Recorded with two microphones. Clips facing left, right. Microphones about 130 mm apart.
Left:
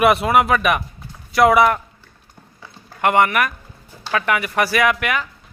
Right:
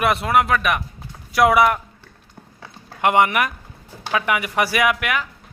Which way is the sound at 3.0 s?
15° right (ahead or behind).